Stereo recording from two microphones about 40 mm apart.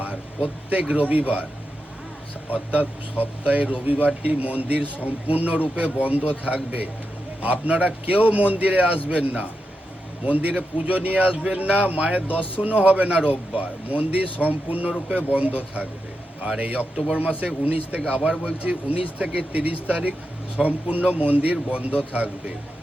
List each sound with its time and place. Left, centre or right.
0.4 s speech: right
2.5 s speech: right